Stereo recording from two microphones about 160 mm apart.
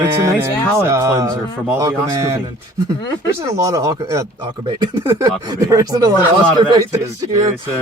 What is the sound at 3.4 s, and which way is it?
Speech, 20° right (ahead or behind).